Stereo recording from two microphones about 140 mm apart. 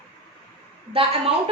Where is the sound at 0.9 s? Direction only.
40° right (ahead or behind).